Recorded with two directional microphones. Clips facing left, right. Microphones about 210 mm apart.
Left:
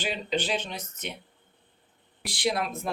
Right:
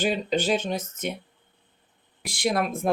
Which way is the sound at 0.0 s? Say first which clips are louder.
Right 5 dB; 45° right (ahead or behind).